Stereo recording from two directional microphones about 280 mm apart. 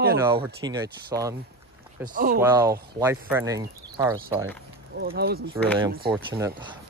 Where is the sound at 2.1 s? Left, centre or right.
Right.